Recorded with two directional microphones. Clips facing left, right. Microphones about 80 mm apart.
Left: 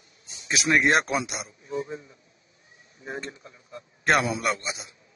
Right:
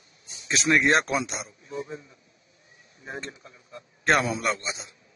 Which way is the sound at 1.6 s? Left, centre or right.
Left.